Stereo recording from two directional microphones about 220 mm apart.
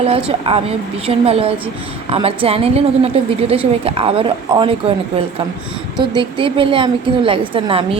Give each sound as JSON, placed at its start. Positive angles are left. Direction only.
{"t": 0.3, "sound": "a woman's voice", "side_deg": -25}
{"t": 6.0, "sound": "a woman's voice", "side_deg": -20}